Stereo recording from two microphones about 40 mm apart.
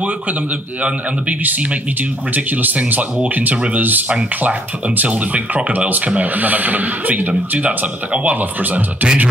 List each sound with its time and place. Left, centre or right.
2.0 s speech: right
4.1 s speech: right
8.4 s speech: right
9.0 s speech: right